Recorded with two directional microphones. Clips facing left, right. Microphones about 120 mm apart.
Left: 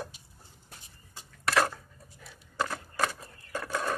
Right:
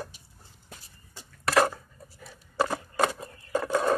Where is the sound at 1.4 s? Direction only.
10° right (ahead or behind).